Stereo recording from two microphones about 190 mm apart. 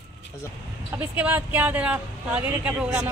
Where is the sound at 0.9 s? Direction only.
10° right (ahead or behind).